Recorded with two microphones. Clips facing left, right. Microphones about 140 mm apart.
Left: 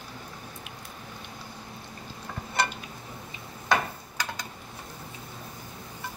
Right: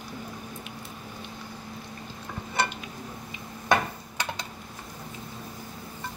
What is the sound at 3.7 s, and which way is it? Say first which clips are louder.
Tick-tock: right 2 dB; 25° right (ahead or behind).